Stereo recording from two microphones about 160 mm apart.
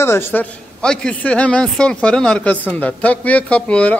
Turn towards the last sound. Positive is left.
turn(degrees=10)  # may be behind; listen again after turning